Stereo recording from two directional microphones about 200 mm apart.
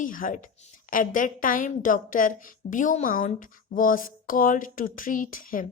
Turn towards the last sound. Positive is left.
turn(degrees=45)  # may be behind; listen again after turning